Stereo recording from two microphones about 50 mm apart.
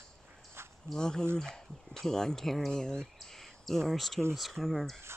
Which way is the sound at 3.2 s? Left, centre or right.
Centre.